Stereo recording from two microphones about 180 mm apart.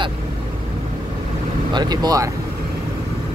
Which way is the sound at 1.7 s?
25° right (ahead or behind).